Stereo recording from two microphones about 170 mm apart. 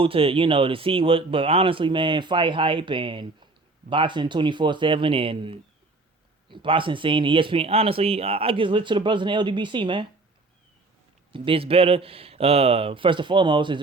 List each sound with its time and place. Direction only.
0.0 s speech: 30° right (ahead or behind)
11.3 s speech: 30° right (ahead or behind)